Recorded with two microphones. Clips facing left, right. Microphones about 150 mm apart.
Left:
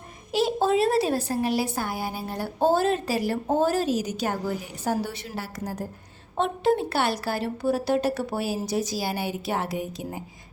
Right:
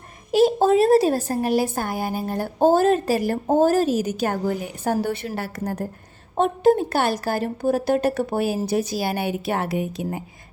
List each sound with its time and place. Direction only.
0.3 s a woman's voice: 45° right (ahead or behind)
6.3 s a woman's voice: 45° right (ahead or behind); by 10.2 s 65° right (ahead or behind)